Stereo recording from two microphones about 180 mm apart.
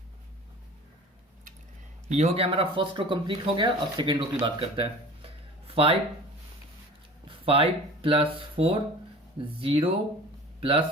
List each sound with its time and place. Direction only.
2.0 s speech: 40° right (ahead or behind)
7.4 s speech: 30° right (ahead or behind)